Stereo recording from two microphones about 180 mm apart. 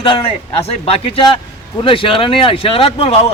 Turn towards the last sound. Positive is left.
turn(degrees=30)  # may be behind; listen again after turning